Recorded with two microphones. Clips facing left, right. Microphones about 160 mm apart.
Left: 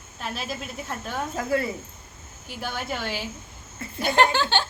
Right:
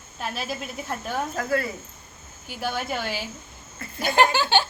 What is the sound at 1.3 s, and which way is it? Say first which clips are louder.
Speech: left 2 dB; 20° left (ahead or behind).